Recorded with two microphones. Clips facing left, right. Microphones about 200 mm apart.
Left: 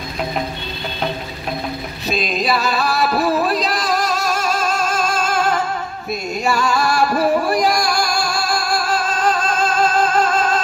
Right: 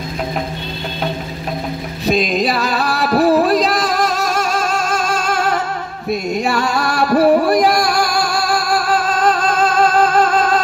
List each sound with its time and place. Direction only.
2.5 s music: 65° right (ahead or behind)
6.3 s music: 60° right (ahead or behind)